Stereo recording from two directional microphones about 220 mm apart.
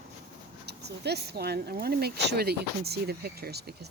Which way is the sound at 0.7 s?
50° right (ahead or behind).